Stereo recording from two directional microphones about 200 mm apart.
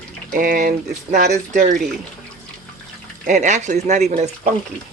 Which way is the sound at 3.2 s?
35° right (ahead or behind).